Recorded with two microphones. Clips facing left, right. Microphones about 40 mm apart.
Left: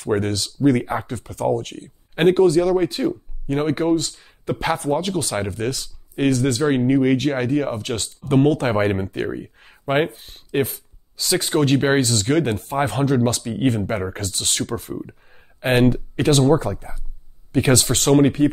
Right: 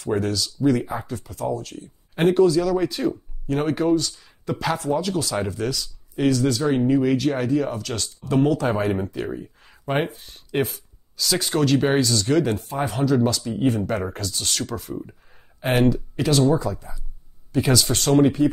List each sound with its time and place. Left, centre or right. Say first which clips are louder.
0.0 s speech: left 2 dB; left
2.3 s speech: even; left
4.7 s speech: left 2 dB; left
9.6 s a sound: left 4 dB; left
10.2 s speech: left 2 dB; left
11.7 s speech: even; left